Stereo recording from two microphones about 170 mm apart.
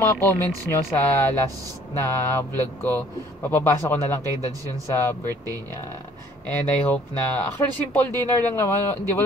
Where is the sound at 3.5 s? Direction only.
10° left (ahead or behind).